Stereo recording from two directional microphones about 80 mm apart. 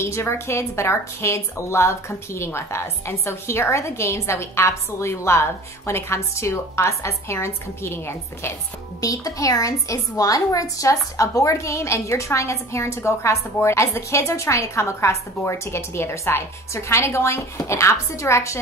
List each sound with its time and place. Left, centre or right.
0.0 s a woman's voice: left
9.0 s a woman's voice: left